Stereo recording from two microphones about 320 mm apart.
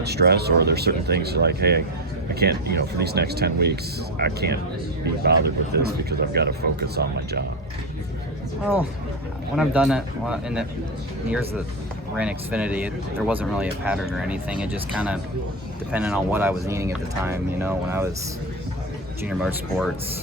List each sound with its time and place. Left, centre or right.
0.0 s speech: right
8.6 s speech: centre
12.1 s speech: centre
19.2 s speech: centre